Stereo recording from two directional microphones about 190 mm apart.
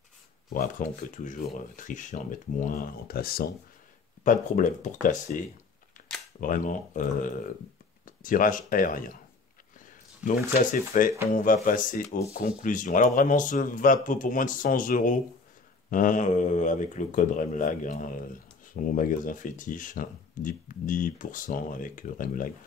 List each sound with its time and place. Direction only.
0.5 s speech: 45° left (ahead or behind)
4.2 s speech: 40° left (ahead or behind)